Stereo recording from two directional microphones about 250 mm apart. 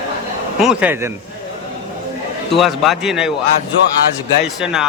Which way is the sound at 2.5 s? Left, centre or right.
Centre.